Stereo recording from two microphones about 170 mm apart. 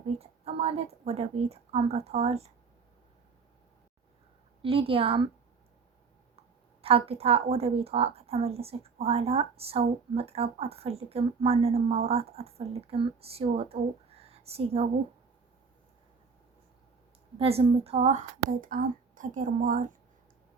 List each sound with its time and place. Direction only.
0.2 s a woman's voice: 35° right (ahead or behind)
4.6 s a woman's voice: 35° right (ahead or behind)
6.8 s a woman's voice: 35° right (ahead or behind)
17.3 s speech: 35° right (ahead or behind)